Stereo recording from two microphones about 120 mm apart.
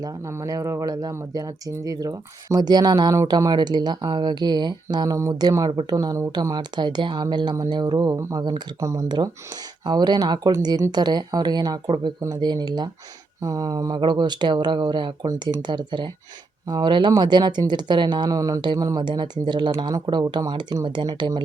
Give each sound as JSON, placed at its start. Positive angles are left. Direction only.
{"t": 0.0, "sound": "speech", "side_deg": -25}
{"t": 8.8, "sound": "speech", "side_deg": -25}
{"t": 9.0, "sound": "speech", "side_deg": -35}